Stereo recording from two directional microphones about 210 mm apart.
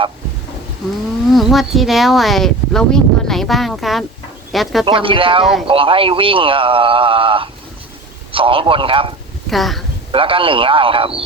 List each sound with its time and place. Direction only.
1.3 s speech: centre (ahead or behind)
4.9 s speech: 25° right (ahead or behind)
9.5 s speech: centre (ahead or behind)
10.1 s speech: 25° right (ahead or behind)